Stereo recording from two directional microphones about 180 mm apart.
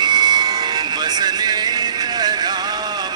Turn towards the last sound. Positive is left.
turn(degrees=-20)  # may be behind; listen again after turning